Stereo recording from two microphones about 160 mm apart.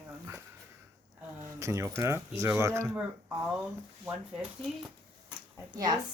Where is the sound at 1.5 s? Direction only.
20° right (ahead or behind).